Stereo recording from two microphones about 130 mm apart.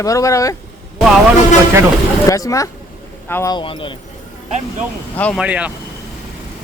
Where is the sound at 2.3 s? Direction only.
25° left (ahead or behind).